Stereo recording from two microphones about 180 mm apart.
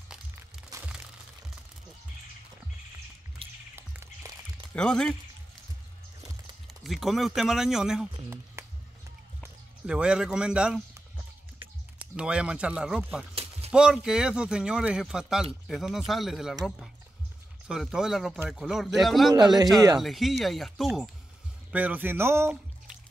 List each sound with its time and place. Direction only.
3.4 s music: 30° right (ahead or behind)
3.7 s music: 15° right (ahead or behind)
4.7 s speech: 5° left (ahead or behind)
6.7 s speech: centre (ahead or behind)
8.6 s music: 15° right (ahead or behind)
9.4 s speech: 5° right (ahead or behind)
12.2 s speech: 5° right (ahead or behind)
13.3 s a sound: 30° right (ahead or behind)
13.7 s speech: 5° right (ahead or behind)
17.6 s speech: 5° right (ahead or behind)
19.3 s speech: 25° right (ahead or behind)
20.0 s speech: centre (ahead or behind)